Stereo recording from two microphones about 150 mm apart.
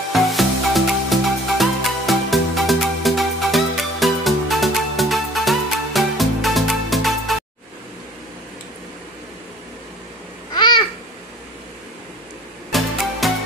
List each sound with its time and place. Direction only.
0.1 s music: centre (ahead or behind)
10.5 s babbling: 30° left (ahead or behind)
12.7 s music: centre (ahead or behind)